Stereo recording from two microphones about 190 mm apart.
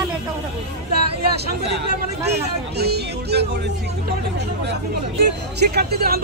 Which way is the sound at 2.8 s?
60° right (ahead or behind).